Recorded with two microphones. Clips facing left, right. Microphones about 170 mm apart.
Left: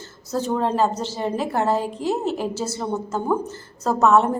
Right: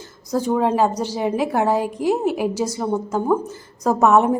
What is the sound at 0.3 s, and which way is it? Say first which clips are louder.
A woman's voice: right 3 dB; 10° right (ahead or behind).